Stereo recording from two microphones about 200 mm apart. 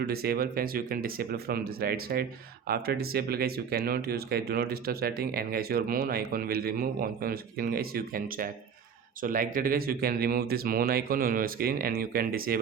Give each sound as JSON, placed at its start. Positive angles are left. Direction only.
{"t": 0.0, "sound": "speech", "side_deg": -50}